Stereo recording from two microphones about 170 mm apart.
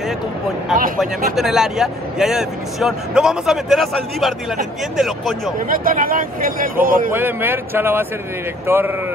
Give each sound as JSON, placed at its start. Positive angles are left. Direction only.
{"t": 1.3, "sound": "speech", "side_deg": 0}
{"t": 5.7, "sound": "a man's voice", "side_deg": -55}
{"t": 7.1, "sound": "a man's voice", "side_deg": -10}